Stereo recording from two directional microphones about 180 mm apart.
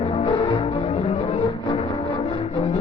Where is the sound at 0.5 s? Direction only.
30° left (ahead or behind).